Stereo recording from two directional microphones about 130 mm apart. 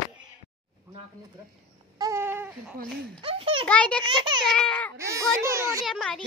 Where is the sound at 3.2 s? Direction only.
40° right (ahead or behind).